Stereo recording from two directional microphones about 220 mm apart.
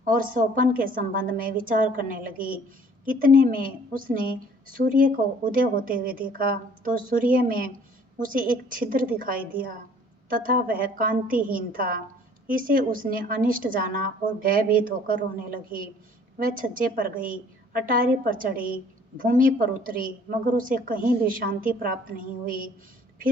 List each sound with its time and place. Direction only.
0.0 s a woman's voice: 40° right (ahead or behind)